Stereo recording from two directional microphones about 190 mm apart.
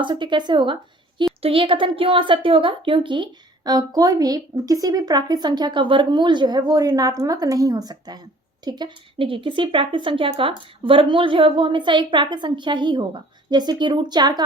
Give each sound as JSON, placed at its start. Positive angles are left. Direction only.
{"t": 0.0, "sound": "a woman's voice", "side_deg": -25}